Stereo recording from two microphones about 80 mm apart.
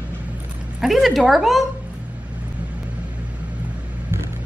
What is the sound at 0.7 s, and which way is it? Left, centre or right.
Speech, centre.